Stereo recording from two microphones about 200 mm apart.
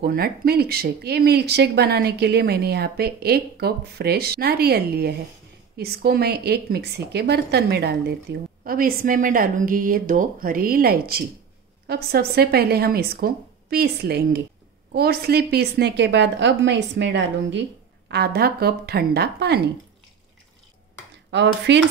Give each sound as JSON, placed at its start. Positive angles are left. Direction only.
{"t": 0.0, "sound": "a woman's voice", "side_deg": -50}
{"t": 21.3, "sound": "a woman's voice", "side_deg": -60}